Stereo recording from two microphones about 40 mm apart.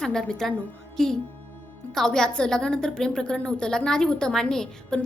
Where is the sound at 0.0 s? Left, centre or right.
Centre.